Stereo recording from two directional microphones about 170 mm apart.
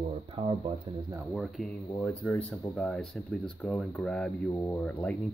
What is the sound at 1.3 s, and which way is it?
Speech, centre (ahead or behind).